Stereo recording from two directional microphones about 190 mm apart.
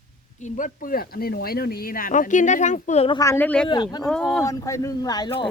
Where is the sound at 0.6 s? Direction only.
50° left (ahead or behind).